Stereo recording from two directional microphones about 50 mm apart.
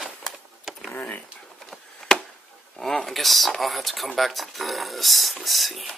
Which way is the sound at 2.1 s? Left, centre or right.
Centre.